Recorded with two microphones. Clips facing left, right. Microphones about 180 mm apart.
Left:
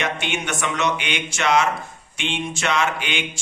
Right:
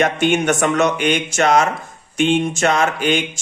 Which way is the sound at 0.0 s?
45° right (ahead or behind).